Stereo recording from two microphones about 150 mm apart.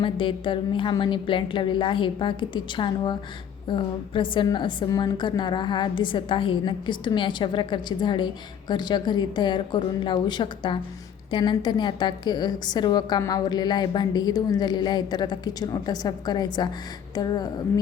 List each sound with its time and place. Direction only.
0.0 s a woman's voice: 35° left (ahead or behind)